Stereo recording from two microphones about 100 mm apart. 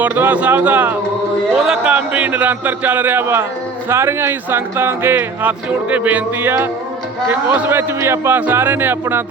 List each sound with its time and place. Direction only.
0.0 s a man's voice: 20° right (ahead or behind)
1.5 s a man's voice: 5° right (ahead or behind); by 9.2 s 20° right (ahead or behind)